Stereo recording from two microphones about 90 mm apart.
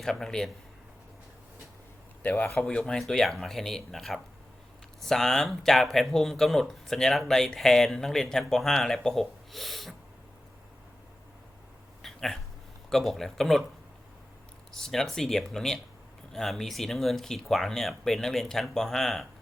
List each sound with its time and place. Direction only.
0.0 s speech: 5° left (ahead or behind)
2.2 s speech: 15° left (ahead or behind); by 9.9 s centre (ahead or behind)
12.0 s a sound: 5° left (ahead or behind)
12.9 s speech: centre (ahead or behind)
14.8 s speech: 5° left (ahead or behind)